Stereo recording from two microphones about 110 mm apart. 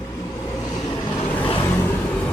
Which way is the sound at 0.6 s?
35° left (ahead or behind).